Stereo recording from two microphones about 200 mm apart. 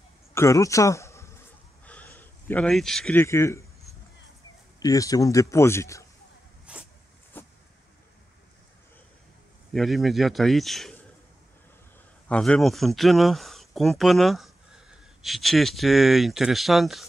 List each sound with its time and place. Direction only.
0.3 s a sound: 15° left (ahead or behind)
1.9 s speech: 10° left (ahead or behind)
4.7 s a man's voice: 20° left (ahead or behind)
6.6 s zipper: 5° right (ahead or behind)
7.3 s vehicle: 10° left (ahead or behind)
9.7 s speech: centre (ahead or behind)
12.3 s speech: 5° left (ahead or behind)